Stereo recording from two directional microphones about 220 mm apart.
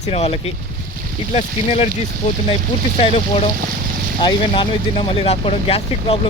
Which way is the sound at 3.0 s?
25° left (ahead or behind).